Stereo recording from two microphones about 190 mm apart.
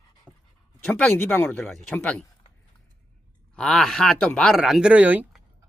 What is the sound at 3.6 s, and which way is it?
Speech, 5° left (ahead or behind).